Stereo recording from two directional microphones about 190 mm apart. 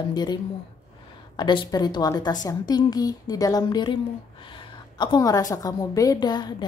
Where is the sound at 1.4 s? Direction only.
25° left (ahead or behind).